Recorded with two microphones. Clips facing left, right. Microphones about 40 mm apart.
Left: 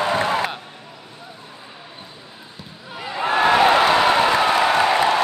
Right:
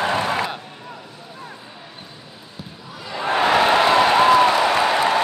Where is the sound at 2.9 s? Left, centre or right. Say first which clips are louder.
Left 2 dB; left.